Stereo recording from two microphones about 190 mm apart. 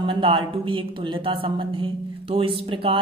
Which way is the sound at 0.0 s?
25° right (ahead or behind).